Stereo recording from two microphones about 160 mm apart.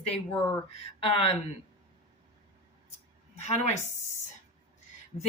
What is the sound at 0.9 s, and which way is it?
Speech, 35° left (ahead or behind).